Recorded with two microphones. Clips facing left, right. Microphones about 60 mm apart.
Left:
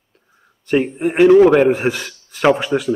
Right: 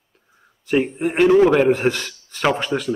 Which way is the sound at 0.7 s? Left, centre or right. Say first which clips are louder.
Left 2 dB; centre.